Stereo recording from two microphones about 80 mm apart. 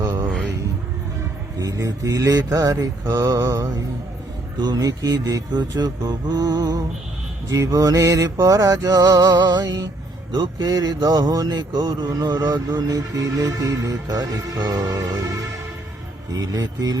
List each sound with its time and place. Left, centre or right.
0.0 s a sound: right
1.5 s mantra: right
10.3 s mantra: right
16.3 s mantra: right